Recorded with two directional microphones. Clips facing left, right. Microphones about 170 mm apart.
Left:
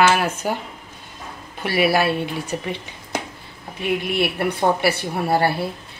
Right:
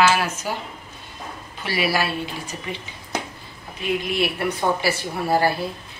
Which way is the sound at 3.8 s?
60° left (ahead or behind).